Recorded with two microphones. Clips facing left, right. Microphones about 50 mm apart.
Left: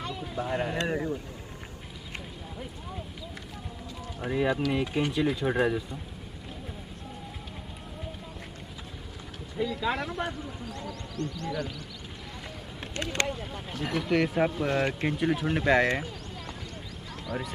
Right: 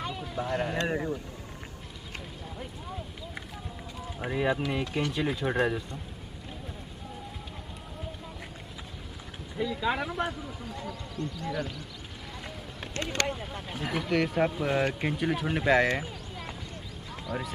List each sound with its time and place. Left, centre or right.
0.2 s speech: centre
0.8 s speech: centre
4.3 s speech: centre
9.6 s speech: centre
12.9 s speech: left
13.3 s speech: centre
17.3 s speech: centre